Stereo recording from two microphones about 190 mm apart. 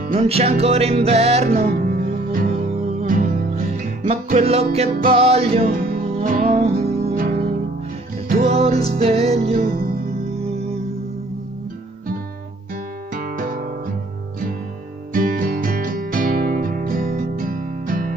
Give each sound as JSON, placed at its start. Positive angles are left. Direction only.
{"t": 0.1, "sound": "music", "side_deg": -30}
{"t": 1.5, "sound": "music", "side_deg": -50}
{"t": 5.6, "sound": "music", "side_deg": -50}
{"t": 6.6, "sound": "music", "side_deg": -35}
{"t": 7.2, "sound": "music", "side_deg": -50}
{"t": 8.5, "sound": "music", "side_deg": -30}
{"t": 9.6, "sound": "music", "side_deg": -55}
{"t": 13.1, "sound": "music", "side_deg": -45}
{"t": 15.1, "sound": "music", "side_deg": -45}